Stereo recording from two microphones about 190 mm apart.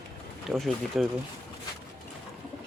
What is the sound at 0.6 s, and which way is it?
Speech, centre (ahead or behind).